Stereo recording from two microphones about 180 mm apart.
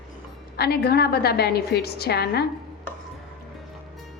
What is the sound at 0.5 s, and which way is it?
A woman's voice, 60° left (ahead or behind).